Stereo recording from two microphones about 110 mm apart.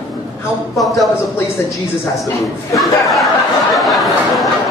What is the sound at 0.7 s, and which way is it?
Speech, centre (ahead or behind).